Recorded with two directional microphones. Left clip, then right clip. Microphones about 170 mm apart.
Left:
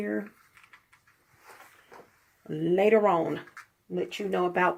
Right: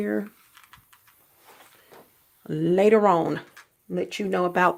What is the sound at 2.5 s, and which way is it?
Speech, 35° right (ahead or behind).